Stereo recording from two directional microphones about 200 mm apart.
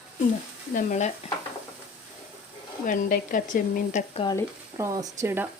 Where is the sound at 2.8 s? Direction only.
45° left (ahead or behind).